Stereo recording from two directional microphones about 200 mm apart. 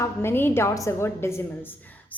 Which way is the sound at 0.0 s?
10° left (ahead or behind).